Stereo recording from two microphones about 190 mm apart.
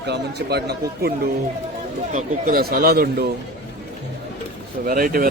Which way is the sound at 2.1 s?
50° right (ahead or behind).